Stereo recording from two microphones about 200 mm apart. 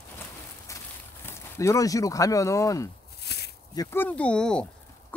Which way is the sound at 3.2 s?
55° left (ahead or behind).